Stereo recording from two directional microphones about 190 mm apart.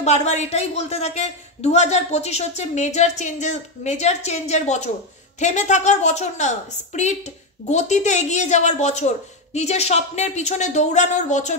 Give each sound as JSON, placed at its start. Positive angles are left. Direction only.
{"t": 0.0, "sound": "a woman's voice", "side_deg": 35}